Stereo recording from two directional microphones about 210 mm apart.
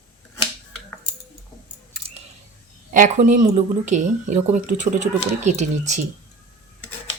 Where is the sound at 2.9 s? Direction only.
40° right (ahead or behind).